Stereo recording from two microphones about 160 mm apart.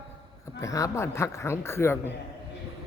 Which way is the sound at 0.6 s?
20° left (ahead or behind).